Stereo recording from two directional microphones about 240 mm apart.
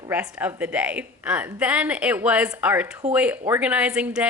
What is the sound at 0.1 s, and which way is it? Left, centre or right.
Speech, centre.